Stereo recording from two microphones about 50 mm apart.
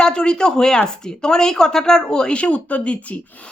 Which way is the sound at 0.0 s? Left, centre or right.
Centre.